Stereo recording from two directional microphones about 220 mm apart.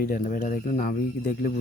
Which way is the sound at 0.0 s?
40° left (ahead or behind).